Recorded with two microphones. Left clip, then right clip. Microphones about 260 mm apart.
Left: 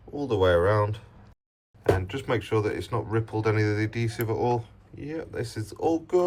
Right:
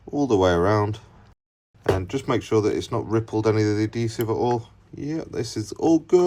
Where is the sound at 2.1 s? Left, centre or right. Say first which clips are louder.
Right 4 dB; right.